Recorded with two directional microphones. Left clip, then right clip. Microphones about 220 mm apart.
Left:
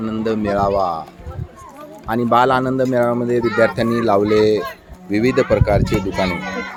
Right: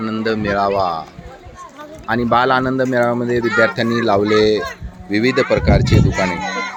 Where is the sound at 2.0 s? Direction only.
5° left (ahead or behind).